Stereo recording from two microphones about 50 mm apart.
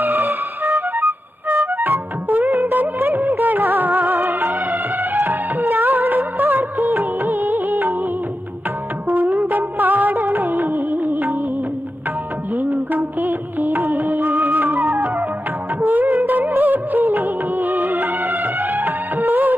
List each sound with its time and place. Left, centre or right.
0.0 s music: right
1.5 s music: right
4.5 s music: right
9.0 s music: right
12.5 s music: right
15.8 s music: right